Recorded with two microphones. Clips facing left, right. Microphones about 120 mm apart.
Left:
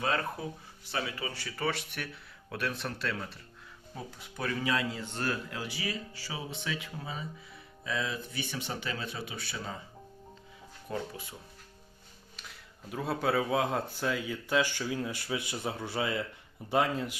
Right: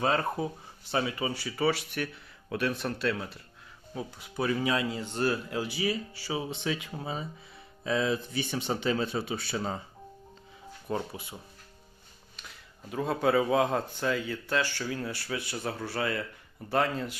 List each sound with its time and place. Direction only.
0.0 s speech: 30° right (ahead or behind)
1.3 s speech: 15° right (ahead or behind)
4.4 s speech: 20° right (ahead or behind)
10.9 s speech: 35° right (ahead or behind)
12.9 s speech: centre (ahead or behind)